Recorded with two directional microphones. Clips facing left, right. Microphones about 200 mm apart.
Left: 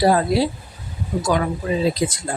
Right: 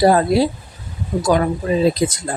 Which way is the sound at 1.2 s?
40° right (ahead or behind).